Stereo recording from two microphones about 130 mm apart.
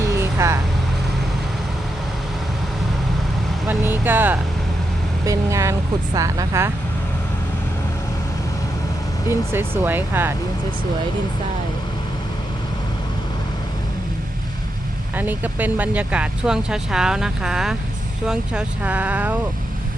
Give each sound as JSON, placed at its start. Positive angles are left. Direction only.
{"t": 0.2, "sound": "vehicle", "side_deg": -20}
{"t": 3.7, "sound": "vehicle", "side_deg": -15}
{"t": 6.1, "sound": "speech", "side_deg": -25}
{"t": 9.5, "sound": "speech", "side_deg": -15}
{"t": 15.1, "sound": "speech", "side_deg": -15}